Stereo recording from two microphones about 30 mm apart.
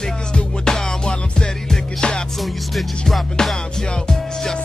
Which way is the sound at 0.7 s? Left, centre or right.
Left.